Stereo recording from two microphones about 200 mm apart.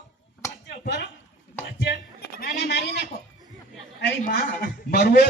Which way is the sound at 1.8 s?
55° left (ahead or behind).